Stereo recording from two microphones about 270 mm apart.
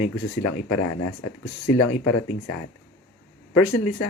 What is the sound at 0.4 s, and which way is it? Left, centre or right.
Speech, left.